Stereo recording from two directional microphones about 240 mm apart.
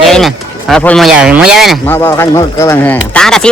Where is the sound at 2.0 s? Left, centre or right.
Centre.